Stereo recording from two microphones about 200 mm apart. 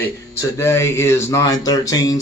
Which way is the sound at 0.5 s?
15° left (ahead or behind).